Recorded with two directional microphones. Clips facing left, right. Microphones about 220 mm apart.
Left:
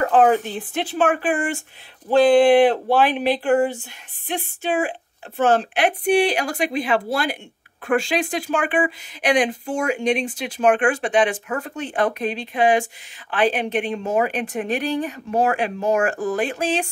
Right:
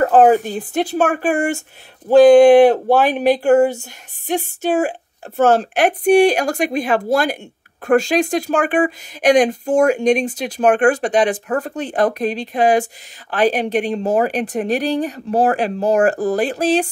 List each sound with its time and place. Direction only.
0.0 s a woman's voice: 40° right (ahead or behind)